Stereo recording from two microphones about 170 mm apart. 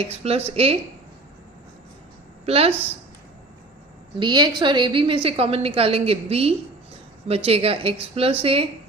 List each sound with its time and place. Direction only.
0.0 s a woman's voice: 35° right (ahead or behind)
2.5 s a woman's voice: 35° right (ahead or behind)
4.2 s a woman's voice: 25° right (ahead or behind)